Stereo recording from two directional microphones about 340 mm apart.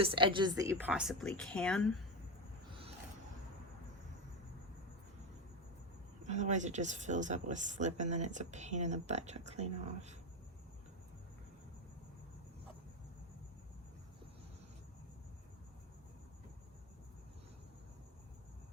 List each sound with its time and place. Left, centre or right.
0.0 s a woman's voice: centre
6.2 s speech: right